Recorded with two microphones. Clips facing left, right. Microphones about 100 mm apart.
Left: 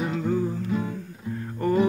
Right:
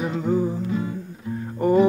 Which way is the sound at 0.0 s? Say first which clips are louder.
Right 3 dB; 15° right (ahead or behind).